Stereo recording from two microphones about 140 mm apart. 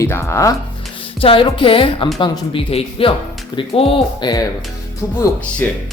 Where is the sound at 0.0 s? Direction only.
20° left (ahead or behind).